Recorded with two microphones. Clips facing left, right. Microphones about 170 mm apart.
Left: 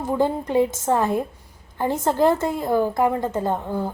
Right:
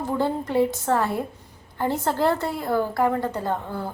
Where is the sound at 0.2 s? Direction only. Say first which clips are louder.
Left 2 dB; 15° left (ahead or behind).